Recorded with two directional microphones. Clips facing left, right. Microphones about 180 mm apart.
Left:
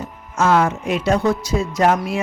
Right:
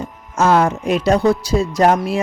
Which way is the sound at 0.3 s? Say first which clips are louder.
Right 2 dB; 35° right (ahead or behind).